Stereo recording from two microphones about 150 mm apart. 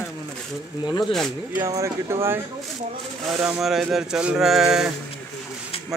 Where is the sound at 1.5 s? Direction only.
20° right (ahead or behind).